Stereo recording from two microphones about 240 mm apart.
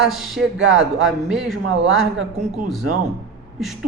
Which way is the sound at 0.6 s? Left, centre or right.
Right.